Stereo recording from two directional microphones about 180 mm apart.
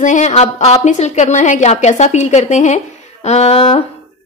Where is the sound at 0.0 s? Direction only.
40° left (ahead or behind).